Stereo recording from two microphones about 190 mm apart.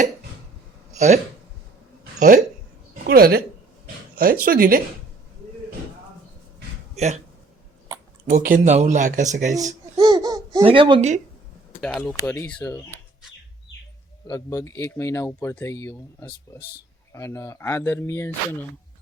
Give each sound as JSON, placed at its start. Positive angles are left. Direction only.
{"t": 0.9, "sound": "speech", "side_deg": -35}
{"t": 3.1, "sound": "speech", "side_deg": -55}
{"t": 6.9, "sound": "speech", "side_deg": -35}
{"t": 8.3, "sound": "speech", "side_deg": -45}
{"t": 9.6, "sound": "babbling", "side_deg": -30}
{"t": 10.6, "sound": "speech", "side_deg": -30}
{"t": 11.8, "sound": "speech", "side_deg": 5}
{"t": 14.3, "sound": "speech", "side_deg": 15}